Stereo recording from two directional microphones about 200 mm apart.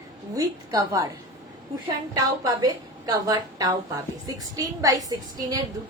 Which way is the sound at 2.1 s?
20° right (ahead or behind).